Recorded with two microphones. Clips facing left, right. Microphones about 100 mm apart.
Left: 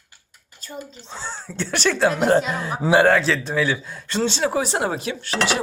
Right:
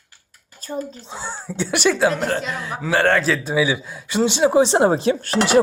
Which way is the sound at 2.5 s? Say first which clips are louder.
Left 2 dB; 35° left (ahead or behind).